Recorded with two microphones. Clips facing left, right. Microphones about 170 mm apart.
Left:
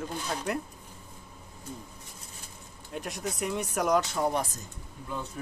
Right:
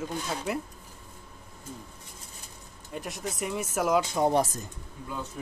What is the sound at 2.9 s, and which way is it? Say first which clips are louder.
Speech: even; centre (ahead or behind).